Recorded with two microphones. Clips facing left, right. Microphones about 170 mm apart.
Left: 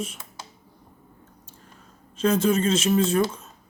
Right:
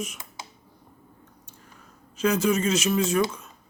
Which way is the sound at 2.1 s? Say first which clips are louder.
Left 2 dB; 30° left (ahead or behind).